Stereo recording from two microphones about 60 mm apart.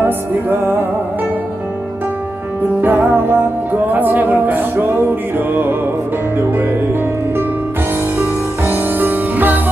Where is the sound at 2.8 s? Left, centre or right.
Right.